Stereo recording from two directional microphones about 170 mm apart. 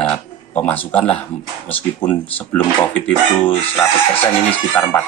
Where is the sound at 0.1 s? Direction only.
10° left (ahead or behind).